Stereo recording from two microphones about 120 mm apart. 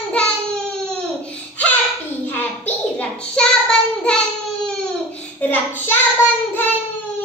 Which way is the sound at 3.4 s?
10° left (ahead or behind).